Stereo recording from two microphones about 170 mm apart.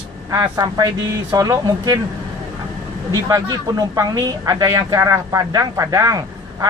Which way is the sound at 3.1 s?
20° right (ahead or behind).